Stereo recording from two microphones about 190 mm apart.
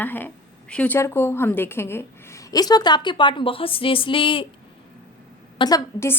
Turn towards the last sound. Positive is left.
turn(degrees=15)  # may be behind; listen again after turning